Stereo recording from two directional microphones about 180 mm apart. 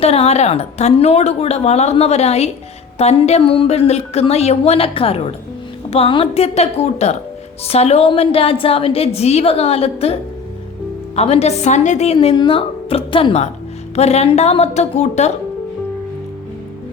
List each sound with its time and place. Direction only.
0.0 s a woman's voice: 35° left (ahead or behind)